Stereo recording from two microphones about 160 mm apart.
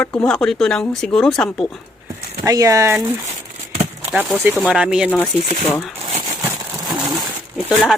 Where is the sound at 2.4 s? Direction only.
20° right (ahead or behind).